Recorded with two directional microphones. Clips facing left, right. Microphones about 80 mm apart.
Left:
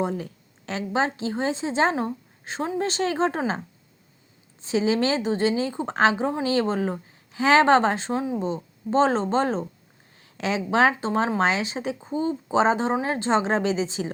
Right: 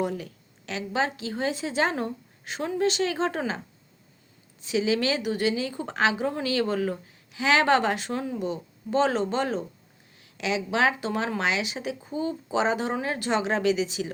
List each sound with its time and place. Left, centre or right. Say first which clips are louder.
0.0 s speech: left 2 dB; left
4.6 s speech: left 2 dB; left